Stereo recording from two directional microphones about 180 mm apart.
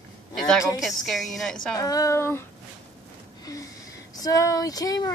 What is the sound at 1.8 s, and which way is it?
Speech, 20° left (ahead or behind).